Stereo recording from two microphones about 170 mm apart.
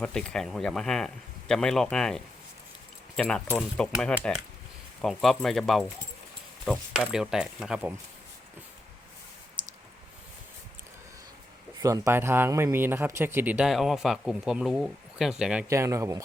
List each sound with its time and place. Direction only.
0.0 s speech: 5° left (ahead or behind)
11.8 s speech: 20° right (ahead or behind); by 15.6 s 5° right (ahead or behind)
15.7 s speech: 20° right (ahead or behind)